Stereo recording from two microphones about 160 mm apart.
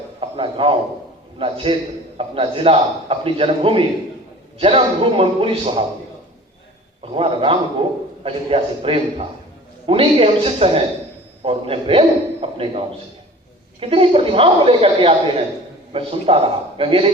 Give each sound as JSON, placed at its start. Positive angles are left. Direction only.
{"t": 0.2, "sound": "a man's voice", "side_deg": -35}
{"t": 7.0, "sound": "a man's voice", "side_deg": -35}